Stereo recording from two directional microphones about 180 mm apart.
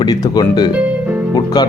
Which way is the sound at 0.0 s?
20° left (ahead or behind).